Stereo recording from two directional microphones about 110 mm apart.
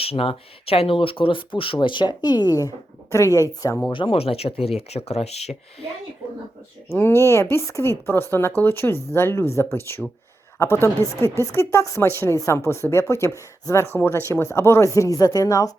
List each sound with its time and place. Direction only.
0.0 s speech: 60° left (ahead or behind); by 3.4 s 30° left (ahead or behind)
3.9 s speech: 55° left (ahead or behind); by 5.5 s 75° left (ahead or behind)
6.9 s speech: 25° left (ahead or behind)